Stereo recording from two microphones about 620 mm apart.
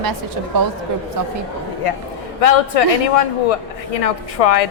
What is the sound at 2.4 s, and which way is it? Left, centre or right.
A man's voice, left.